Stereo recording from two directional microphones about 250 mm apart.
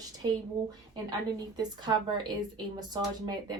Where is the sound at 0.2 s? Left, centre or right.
Centre.